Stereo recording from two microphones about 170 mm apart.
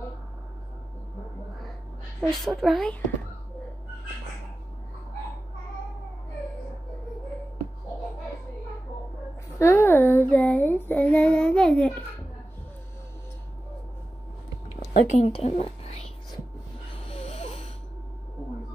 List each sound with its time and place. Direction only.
2.1 s a woman's voice: centre (ahead or behind)
9.6 s a child's voice: 15° left (ahead or behind)
15.1 s speech: 40° left (ahead or behind)
17.0 s wheeze: 35° left (ahead or behind)